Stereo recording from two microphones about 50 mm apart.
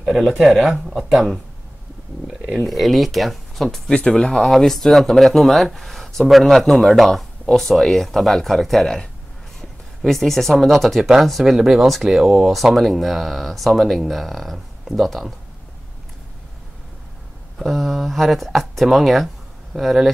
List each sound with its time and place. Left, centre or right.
0.2 s speech: centre
0.5 s speech: centre
2.2 s a sound: centre
2.6 s speech: centre
3.9 s speech: centre
17.6 s speech: centre